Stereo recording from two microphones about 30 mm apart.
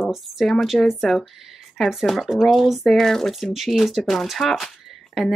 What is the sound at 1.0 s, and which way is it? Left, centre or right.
Speech, centre.